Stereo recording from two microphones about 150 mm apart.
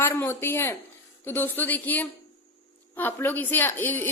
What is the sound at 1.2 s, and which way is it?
A woman's voice, 15° left (ahead or behind).